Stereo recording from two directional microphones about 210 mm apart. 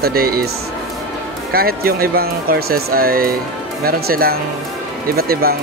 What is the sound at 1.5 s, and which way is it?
Speech, 45° right (ahead or behind).